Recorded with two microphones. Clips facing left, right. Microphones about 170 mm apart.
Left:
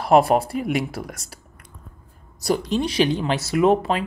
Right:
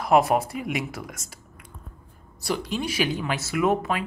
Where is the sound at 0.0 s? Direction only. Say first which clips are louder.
Left 4 dB; 30° left (ahead or behind).